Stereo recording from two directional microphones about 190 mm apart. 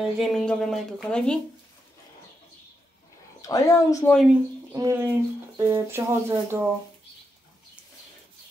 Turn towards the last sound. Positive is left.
turn(degrees=-15)  # may be behind; listen again after turning